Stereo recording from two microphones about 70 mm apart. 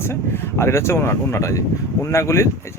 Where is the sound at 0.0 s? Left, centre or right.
Left.